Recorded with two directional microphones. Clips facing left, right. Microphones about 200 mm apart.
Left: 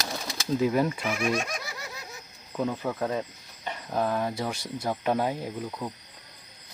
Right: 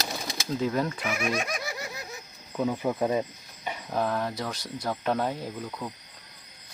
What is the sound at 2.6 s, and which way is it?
Speech, 10° right (ahead or behind).